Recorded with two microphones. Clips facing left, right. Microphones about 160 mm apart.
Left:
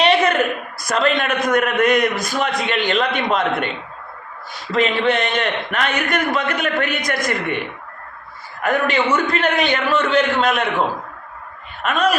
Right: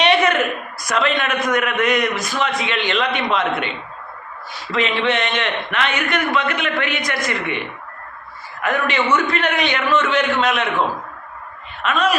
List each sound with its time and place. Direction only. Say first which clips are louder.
0.0 s a sound: left 1 dB; 30° left (ahead or behind)
0.9 s a man's voice: left 1 dB; 35° left (ahead or behind)
4.7 s a man's voice: left 2 dB; 35° left (ahead or behind)
8.6 s a man's voice: left 2 dB; 35° left (ahead or behind)
11.8 s a man's voice: left 1 dB; 45° left (ahead or behind)